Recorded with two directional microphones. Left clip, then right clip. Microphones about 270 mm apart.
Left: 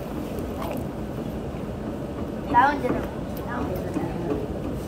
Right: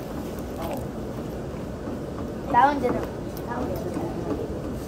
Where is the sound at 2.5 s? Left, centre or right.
Right.